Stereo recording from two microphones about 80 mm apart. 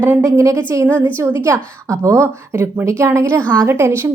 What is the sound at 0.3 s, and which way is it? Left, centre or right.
Speech, right.